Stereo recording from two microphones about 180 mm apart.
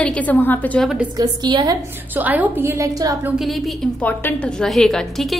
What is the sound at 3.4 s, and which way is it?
A woman's voice, centre (ahead or behind).